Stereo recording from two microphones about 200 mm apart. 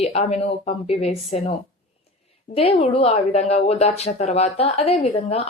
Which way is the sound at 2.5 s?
30° left (ahead or behind).